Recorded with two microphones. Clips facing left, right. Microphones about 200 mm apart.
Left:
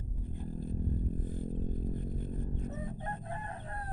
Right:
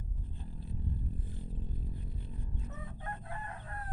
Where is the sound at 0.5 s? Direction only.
45° left (ahead or behind).